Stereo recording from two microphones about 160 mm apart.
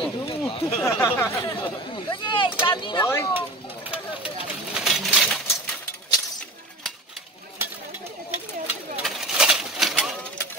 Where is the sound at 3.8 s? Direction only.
10° right (ahead or behind).